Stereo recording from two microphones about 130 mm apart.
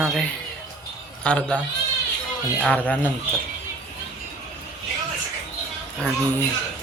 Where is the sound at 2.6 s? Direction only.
10° left (ahead or behind).